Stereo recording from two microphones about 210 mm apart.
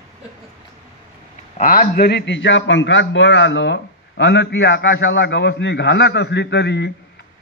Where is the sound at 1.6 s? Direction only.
40° left (ahead or behind).